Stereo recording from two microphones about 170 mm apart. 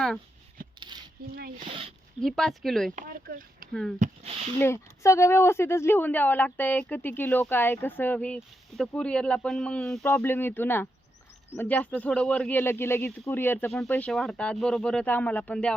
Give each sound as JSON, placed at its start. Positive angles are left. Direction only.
{"t": 0.8, "sound": "coin", "side_deg": -25}
{"t": 1.4, "sound": "speech", "side_deg": -65}
{"t": 2.2, "sound": "speech", "side_deg": 0}
{"t": 2.9, "sound": "speech", "side_deg": -60}
{"t": 3.7, "sound": "speech", "side_deg": 5}
{"t": 4.0, "sound": "speech", "side_deg": -35}
{"t": 4.6, "sound": "speech", "side_deg": 15}